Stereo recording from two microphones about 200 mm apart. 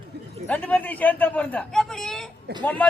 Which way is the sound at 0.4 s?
5° left (ahead or behind).